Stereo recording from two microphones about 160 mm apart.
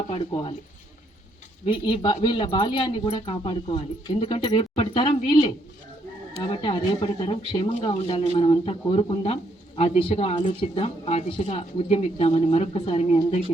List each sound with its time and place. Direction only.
0.1 s speech: 35° left (ahead or behind)
1.6 s speech: 30° left (ahead or behind)